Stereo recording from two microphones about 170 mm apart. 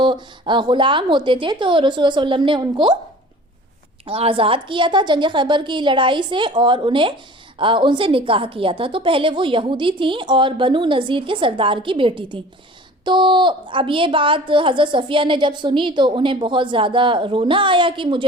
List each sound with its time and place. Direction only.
0.0 s a woman's voice: 25° right (ahead or behind)
4.0 s a woman's voice: 35° right (ahead or behind)